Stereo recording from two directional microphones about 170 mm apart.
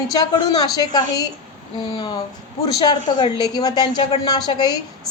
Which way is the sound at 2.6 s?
25° left (ahead or behind).